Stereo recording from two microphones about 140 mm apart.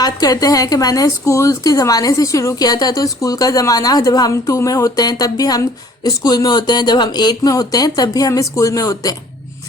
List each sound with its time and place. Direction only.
0.0 s a woman's voice: 25° left (ahead or behind)